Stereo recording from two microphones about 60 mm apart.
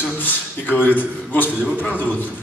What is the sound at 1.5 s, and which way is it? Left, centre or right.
Speech, centre.